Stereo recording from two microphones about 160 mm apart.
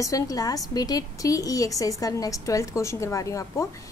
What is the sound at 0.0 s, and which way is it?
A woman's voice, 20° left (ahead or behind).